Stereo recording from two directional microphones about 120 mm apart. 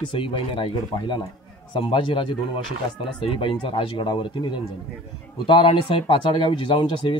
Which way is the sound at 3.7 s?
45° left (ahead or behind).